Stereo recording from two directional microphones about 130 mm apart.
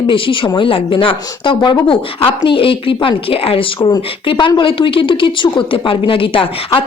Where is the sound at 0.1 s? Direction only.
40° left (ahead or behind).